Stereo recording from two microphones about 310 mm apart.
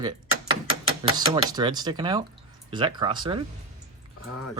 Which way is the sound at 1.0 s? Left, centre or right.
Centre.